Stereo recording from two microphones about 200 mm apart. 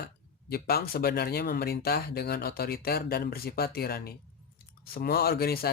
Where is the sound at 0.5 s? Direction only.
50° left (ahead or behind).